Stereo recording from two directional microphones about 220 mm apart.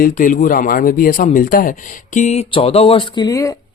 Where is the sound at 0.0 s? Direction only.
35° left (ahead or behind).